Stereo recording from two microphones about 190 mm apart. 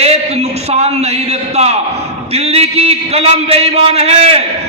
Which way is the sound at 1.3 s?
35° right (ahead or behind).